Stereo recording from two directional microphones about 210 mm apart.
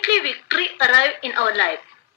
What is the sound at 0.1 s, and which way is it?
Speech, 55° left (ahead or behind).